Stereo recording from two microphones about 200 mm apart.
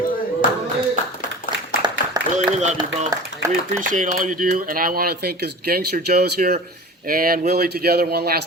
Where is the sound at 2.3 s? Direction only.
35° right (ahead or behind).